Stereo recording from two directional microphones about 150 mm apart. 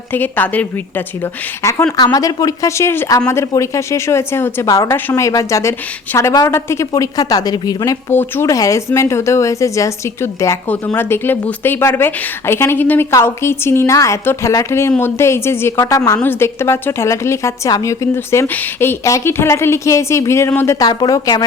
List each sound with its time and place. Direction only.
0.1 s speech: 10° left (ahead or behind)
8.1 s speech: 15° left (ahead or behind)